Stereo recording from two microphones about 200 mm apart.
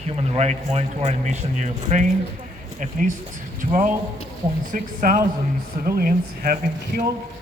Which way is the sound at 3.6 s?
40° right (ahead or behind).